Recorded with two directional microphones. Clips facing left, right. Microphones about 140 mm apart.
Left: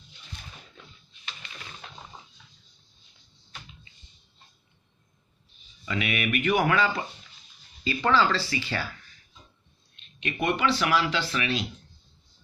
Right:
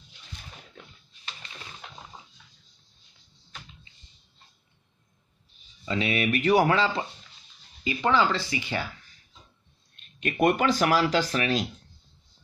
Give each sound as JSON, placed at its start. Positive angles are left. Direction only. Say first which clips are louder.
{"t": 5.9, "sound": "speech", "louder": "right 3 dB", "side_deg": -30}
{"t": 9.9, "sound": "speech", "louder": "right 5 dB", "side_deg": -45}